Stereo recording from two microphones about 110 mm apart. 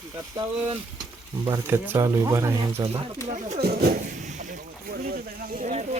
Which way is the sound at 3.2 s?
90° right.